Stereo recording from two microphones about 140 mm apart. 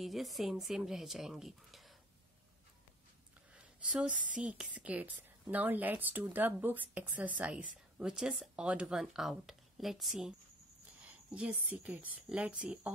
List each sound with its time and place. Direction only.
0.0 s speech: centre (ahead or behind)
3.5 s a woman's voice: 5° right (ahead or behind)
11.3 s a woman's voice: 10° right (ahead or behind)